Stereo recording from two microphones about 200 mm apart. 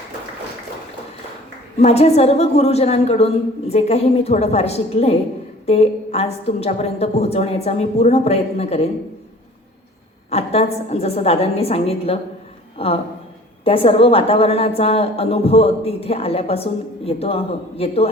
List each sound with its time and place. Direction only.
1.8 s a woman's voice: 30° left (ahead or behind)
10.2 s a woman's voice: 30° left (ahead or behind)